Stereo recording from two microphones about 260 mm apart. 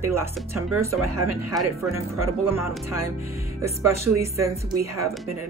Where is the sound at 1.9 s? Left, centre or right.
Centre.